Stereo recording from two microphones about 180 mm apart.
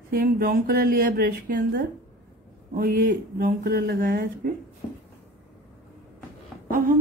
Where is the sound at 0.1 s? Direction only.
55° right (ahead or behind).